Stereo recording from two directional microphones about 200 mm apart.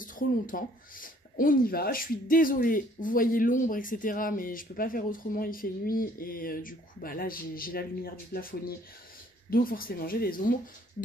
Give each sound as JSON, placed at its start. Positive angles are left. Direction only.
{"t": 0.0, "sound": "speech", "side_deg": 45}